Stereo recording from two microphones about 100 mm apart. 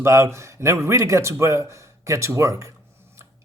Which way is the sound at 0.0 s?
25° right (ahead or behind).